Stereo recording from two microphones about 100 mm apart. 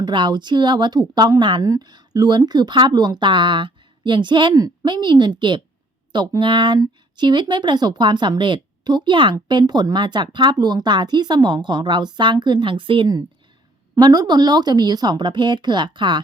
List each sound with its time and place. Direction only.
0.0 s speech: 50° right (ahead or behind)
4.5 s speech: 40° right (ahead or behind); by 13.1 s 60° right (ahead or behind)
14.0 s speech: 40° right (ahead or behind)